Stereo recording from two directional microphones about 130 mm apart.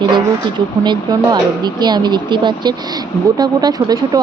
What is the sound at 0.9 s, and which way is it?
Speech, 35° right (ahead or behind).